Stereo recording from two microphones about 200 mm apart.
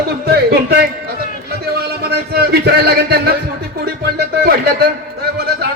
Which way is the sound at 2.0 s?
50° right (ahead or behind).